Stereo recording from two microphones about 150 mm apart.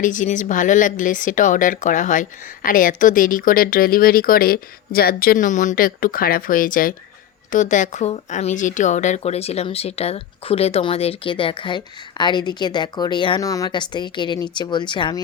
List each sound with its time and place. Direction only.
0.0 s speech: 60° left (ahead or behind)
7.5 s speech: 55° left (ahead or behind); by 15.2 s 30° left (ahead or behind)